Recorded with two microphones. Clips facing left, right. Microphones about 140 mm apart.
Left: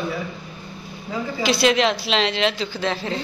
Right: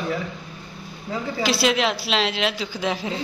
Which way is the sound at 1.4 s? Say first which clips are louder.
Left 3 dB; 5° right (ahead or behind).